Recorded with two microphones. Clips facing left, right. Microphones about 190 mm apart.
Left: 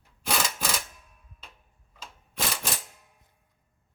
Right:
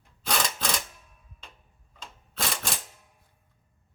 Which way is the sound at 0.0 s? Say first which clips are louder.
Even; 5° left (ahead or behind).